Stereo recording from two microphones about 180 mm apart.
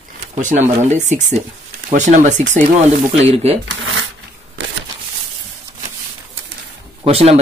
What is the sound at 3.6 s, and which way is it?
Speech, 90° right.